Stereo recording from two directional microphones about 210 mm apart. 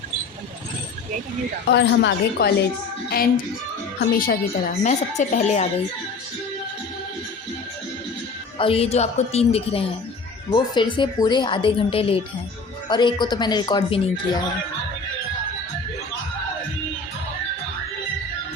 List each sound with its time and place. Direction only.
1.7 s speech: 55° left (ahead or behind)
3.1 s music: 45° left (ahead or behind)
4.0 s speech: 45° left (ahead or behind)
8.5 s a woman's voice: 25° left (ahead or behind)